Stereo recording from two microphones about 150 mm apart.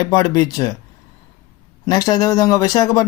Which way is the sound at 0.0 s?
25° left (ahead or behind).